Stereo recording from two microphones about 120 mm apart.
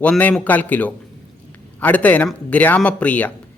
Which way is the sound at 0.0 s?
10° left (ahead or behind).